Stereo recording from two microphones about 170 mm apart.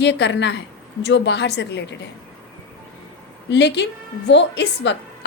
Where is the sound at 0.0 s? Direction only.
90° left.